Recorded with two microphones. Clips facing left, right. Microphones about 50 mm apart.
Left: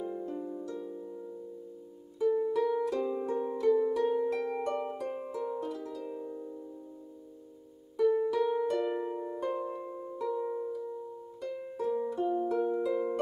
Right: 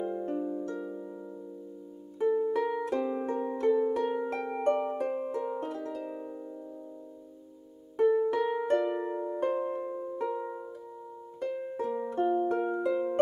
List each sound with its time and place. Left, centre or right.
0.0 s harp: right
2.1 s music: right
3.5 s harp: right
4.4 s harp: right
4.6 s music: right
8.0 s music: right
8.9 s music: right
9.4 s music: right